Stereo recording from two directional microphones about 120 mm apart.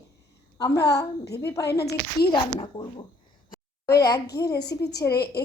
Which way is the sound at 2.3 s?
40° left (ahead or behind).